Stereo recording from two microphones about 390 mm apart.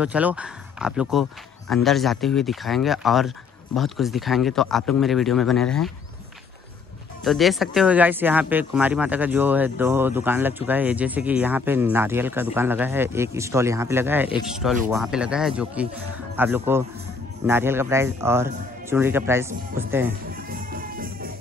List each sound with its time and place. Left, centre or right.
0.0 s speech: centre
7.2 s speech: centre
20.7 s music: right